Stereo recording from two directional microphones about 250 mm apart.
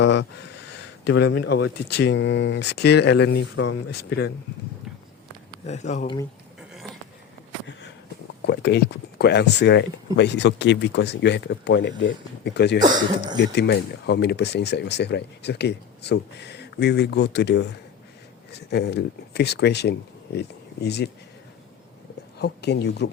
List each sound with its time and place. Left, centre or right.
0.0 s speech: left
5.6 s speech: left
8.4 s speech: left
22.4 s speech: left